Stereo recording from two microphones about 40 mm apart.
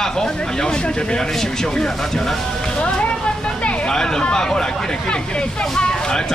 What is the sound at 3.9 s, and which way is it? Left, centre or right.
Speech, centre.